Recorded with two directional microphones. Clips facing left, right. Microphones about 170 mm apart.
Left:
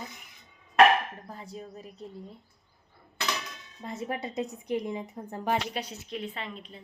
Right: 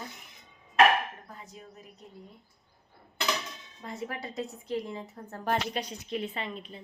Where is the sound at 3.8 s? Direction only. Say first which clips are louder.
Left 3 dB; 20° left (ahead or behind).